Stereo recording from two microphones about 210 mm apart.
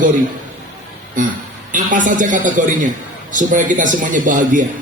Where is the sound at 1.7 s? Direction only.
40° right (ahead or behind).